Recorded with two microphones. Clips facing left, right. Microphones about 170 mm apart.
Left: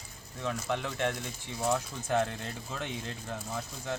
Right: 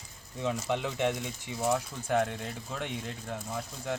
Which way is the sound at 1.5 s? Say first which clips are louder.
Right 1 dB; 5° right (ahead or behind).